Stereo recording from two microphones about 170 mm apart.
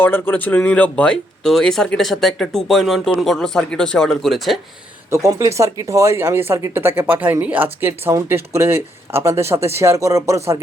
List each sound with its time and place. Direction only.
0.0 s speech: 10° left (ahead or behind)
5.1 s speech: 20° right (ahead or behind)